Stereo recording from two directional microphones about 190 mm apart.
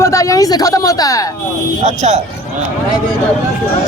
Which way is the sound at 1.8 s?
35° right (ahead or behind).